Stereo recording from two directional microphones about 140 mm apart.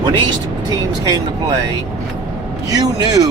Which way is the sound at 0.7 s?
25° right (ahead or behind).